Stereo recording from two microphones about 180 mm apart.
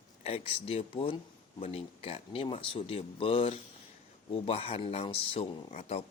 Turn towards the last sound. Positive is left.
turn(degrees=35)  # may be behind; listen again after turning